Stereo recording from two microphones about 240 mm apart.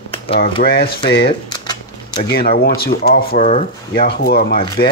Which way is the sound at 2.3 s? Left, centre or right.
Left.